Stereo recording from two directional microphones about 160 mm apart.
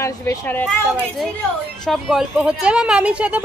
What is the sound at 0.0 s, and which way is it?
Speech, 15° left (ahead or behind).